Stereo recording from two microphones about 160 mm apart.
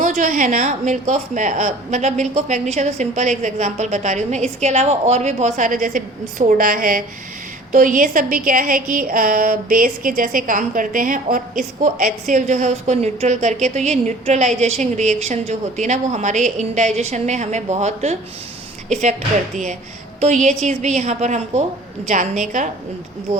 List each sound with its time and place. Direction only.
0.0 s a woman's voice: 55° right (ahead or behind)
20.2 s a woman's voice: 45° right (ahead or behind)